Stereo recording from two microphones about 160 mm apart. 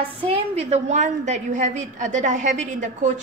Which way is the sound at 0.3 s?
45° right (ahead or behind).